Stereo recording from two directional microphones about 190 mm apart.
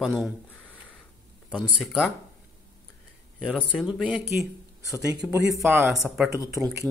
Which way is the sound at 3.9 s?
5° right (ahead or behind).